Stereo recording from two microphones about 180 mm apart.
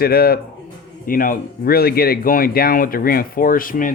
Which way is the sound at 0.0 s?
55° left (ahead or behind).